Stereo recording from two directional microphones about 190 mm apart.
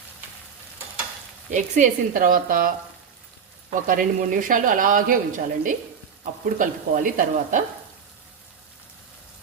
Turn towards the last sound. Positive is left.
turn(degrees=-45)  # may be behind; listen again after turning